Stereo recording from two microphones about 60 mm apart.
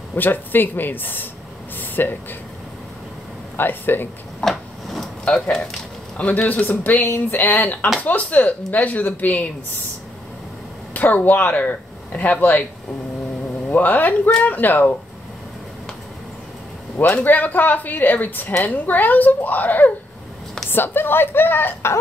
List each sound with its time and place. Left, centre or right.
0.1 s speech: left
1.8 s a sound: left
3.5 s speech: left
4.4 s drawer open or close: centre
5.3 s speech: centre
6.1 s speech: left
10.9 s speech: left
13.7 s speech: left
17.1 s speech: left